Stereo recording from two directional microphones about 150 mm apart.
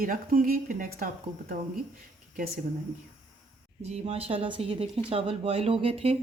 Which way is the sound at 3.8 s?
45° right (ahead or behind).